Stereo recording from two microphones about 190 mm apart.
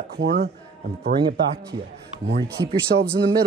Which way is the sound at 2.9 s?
50° right (ahead or behind).